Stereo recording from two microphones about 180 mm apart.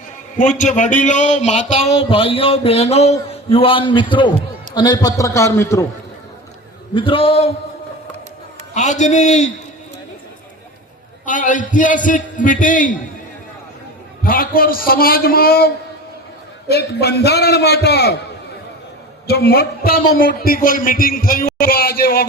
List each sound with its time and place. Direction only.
0.3 s a man's voice: 45° left (ahead or behind); by 5.8 s 15° left (ahead or behind)
6.9 s a man's voice: 30° left (ahead or behind)
8.7 s speech: 40° left (ahead or behind)
11.3 s a man's voice: 45° left (ahead or behind)
14.3 s a man's voice: 55° left (ahead or behind)
19.3 s a man's voice: 60° left (ahead or behind)